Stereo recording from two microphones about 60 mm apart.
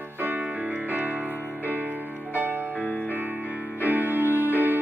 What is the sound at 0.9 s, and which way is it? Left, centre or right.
Music, right.